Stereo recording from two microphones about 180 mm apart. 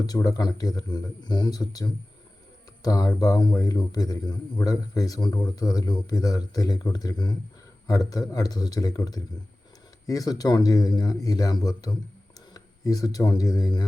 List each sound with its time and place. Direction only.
0.0 s a man's voice: 20° left (ahead or behind)